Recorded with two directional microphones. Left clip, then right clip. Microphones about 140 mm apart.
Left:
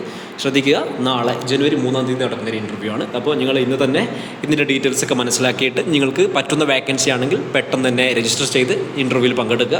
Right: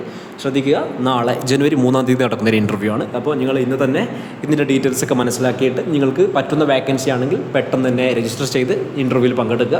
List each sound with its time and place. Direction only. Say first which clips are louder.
0.4 s a man's voice: left 1 dB; 5° left (ahead or behind)
1.5 s a man's voice: even; 45° right (ahead or behind)
1.7 s a man's voice: right 3 dB; 65° right (ahead or behind)
3.2 s speech: left 2 dB; centre (ahead or behind)
4.9 s a man's voice: right 1 dB; 15° right (ahead or behind)
5.4 s a man's voice: even; centre (ahead or behind)